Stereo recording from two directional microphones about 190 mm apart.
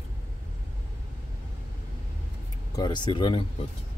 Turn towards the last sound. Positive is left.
turn(degrees=25)  # may be behind; listen again after turning